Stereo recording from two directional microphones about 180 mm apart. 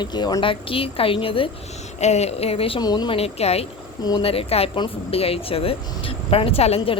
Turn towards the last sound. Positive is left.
turn(degrees=30)  # may be behind; listen again after turning